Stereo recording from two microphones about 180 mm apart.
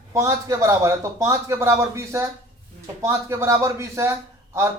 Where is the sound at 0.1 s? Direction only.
20° right (ahead or behind).